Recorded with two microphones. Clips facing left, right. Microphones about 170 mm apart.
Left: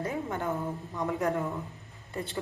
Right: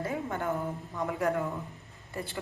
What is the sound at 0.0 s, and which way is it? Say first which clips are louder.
A woman's voice: even; 20° left (ahead or behind).